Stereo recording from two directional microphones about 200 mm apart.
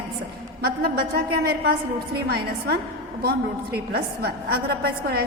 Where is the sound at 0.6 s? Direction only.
50° right (ahead or behind).